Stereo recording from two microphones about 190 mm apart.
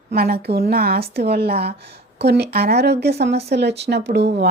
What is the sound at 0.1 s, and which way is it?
A woman's voice, 55° right (ahead or behind).